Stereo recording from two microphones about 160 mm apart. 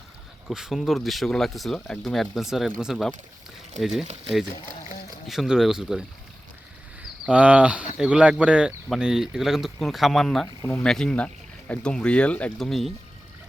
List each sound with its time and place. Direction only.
0.4 s speech: centre (ahead or behind)
5.3 s speech: centre (ahead or behind)
7.3 s speech: 10° right (ahead or behind)
10.4 s speech: 15° left (ahead or behind)
10.8 s speech: 5° left (ahead or behind)